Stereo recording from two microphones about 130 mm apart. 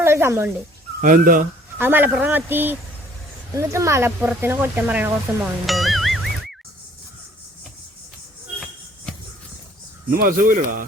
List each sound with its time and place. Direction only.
0.0 s dog: 20° right (ahead or behind)
1.0 s speech: 90° right
1.8 s speech: 15° right (ahead or behind)
5.6 s music: centre (ahead or behind)
10.1 s speech: 90° right